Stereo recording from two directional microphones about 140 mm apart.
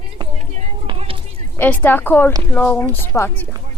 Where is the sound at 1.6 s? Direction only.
15° left (ahead or behind).